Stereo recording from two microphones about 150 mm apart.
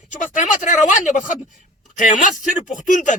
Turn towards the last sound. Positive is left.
turn(degrees=60)  # may be behind; listen again after turning